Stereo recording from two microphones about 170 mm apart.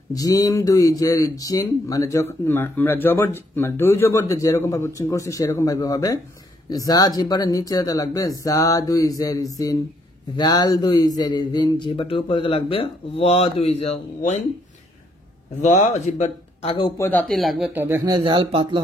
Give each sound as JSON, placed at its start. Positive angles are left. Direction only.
{"t": 0.1, "sound": "a man's voice", "side_deg": 20}
{"t": 15.6, "sound": "speech", "side_deg": 45}
{"t": 16.7, "sound": "speech", "side_deg": 30}
{"t": 17.1, "sound": "speech", "side_deg": 5}
{"t": 17.8, "sound": "speech", "side_deg": -15}
{"t": 18.1, "sound": "speech", "side_deg": -30}